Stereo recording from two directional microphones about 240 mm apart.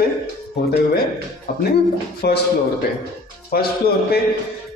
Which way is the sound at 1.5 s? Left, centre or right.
Left.